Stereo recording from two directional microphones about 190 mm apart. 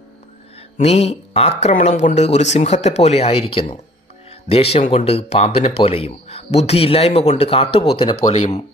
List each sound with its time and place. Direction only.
0.7 s speech: 35° left (ahead or behind)